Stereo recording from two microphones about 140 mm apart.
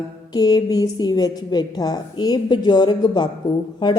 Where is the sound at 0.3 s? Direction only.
30° left (ahead or behind).